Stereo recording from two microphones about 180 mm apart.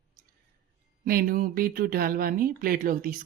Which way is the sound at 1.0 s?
55° right (ahead or behind).